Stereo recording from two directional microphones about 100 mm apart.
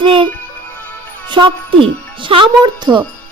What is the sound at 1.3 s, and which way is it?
Speech, 55° right (ahead or behind).